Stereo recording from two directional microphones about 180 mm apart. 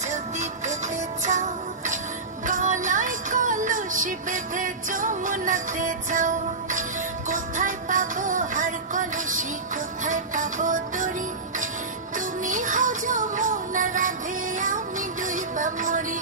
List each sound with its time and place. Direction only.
0.1 s music: 40° right (ahead or behind)
12.4 s music: 45° right (ahead or behind)